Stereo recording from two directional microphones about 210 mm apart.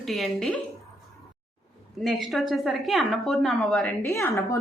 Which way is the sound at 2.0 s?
Centre (ahead or behind).